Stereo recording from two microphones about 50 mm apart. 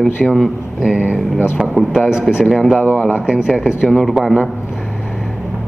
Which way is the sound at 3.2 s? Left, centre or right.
Centre.